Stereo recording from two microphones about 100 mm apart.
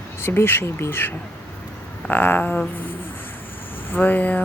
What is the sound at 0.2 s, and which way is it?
Speech, 25° left (ahead or behind).